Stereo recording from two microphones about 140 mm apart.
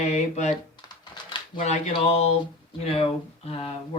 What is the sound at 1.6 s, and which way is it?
Speech, 60° left (ahead or behind).